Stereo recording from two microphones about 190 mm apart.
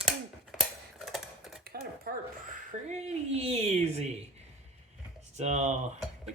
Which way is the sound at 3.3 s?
35° right (ahead or behind).